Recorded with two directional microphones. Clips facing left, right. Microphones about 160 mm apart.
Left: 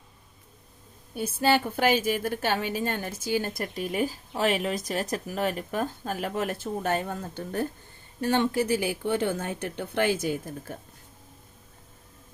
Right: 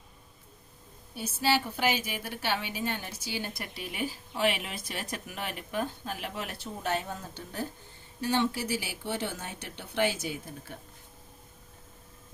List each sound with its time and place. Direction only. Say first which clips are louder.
1.1 s a woman's voice: left 5 dB; 50° left (ahead or behind)